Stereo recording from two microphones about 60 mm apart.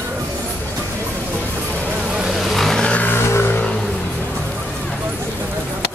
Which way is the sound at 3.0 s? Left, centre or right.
Left.